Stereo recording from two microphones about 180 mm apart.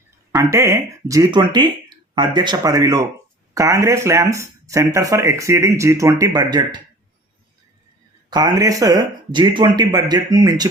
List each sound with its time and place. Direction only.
0.3 s speech: 15° right (ahead or behind)
8.3 s speech: 20° right (ahead or behind)